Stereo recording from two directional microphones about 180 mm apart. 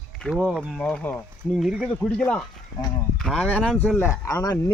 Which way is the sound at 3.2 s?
5° left (ahead or behind).